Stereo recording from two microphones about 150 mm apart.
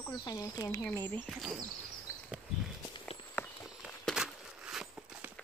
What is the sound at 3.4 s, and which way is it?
Walk, 15° left (ahead or behind).